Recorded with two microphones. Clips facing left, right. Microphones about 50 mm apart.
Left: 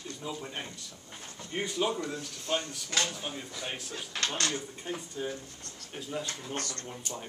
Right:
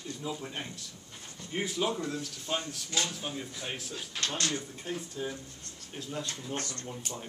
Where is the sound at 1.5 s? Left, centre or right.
Centre.